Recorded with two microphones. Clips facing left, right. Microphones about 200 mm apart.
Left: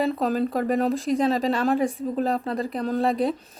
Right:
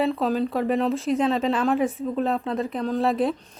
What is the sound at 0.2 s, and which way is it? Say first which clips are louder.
A woman's voice: even; centre (ahead or behind).